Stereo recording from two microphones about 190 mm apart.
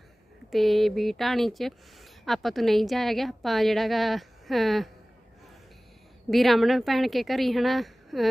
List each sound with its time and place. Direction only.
0.5 s speech: centre (ahead or behind)
6.3 s speech: centre (ahead or behind)